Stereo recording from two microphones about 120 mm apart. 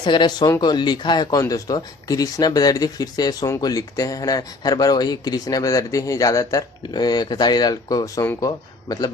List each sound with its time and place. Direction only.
0.0 s speech: 40° left (ahead or behind)